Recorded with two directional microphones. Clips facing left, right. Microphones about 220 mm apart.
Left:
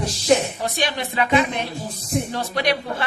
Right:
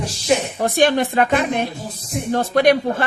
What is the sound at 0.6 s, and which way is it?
Speech, 50° right (ahead or behind).